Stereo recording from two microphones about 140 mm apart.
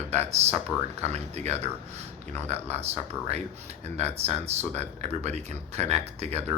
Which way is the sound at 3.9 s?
50° right (ahead or behind).